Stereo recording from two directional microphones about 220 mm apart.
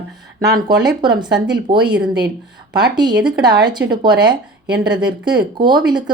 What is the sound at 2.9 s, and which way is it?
Speech, 20° right (ahead or behind).